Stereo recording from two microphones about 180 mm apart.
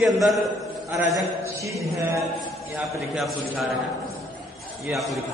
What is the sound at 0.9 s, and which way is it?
Speech, 15° right (ahead or behind).